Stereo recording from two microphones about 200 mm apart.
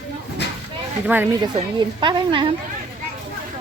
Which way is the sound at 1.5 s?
25° right (ahead or behind).